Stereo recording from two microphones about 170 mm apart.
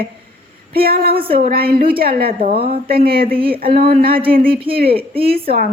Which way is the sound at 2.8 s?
65° right (ahead or behind).